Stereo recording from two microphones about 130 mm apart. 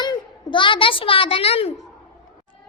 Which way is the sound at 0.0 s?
35° left (ahead or behind).